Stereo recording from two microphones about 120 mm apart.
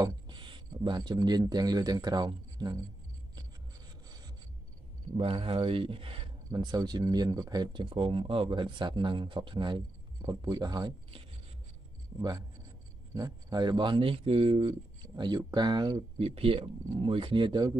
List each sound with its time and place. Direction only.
0.0 s speech: 40° right (ahead or behind)
5.1 s speech: 50° right (ahead or behind)
12.2 s speech: 35° right (ahead or behind); by 14.8 s 55° right (ahead or behind)
15.1 s speech: 35° right (ahead or behind)
16.2 s speech: 55° right (ahead or behind); by 17.7 s 40° right (ahead or behind)